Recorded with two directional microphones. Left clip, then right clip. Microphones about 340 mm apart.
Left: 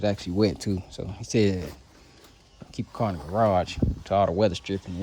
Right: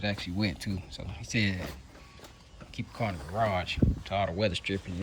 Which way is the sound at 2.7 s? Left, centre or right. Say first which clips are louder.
Left 5 dB; centre.